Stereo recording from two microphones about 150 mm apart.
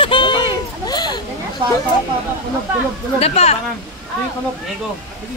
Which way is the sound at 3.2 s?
45° left (ahead or behind).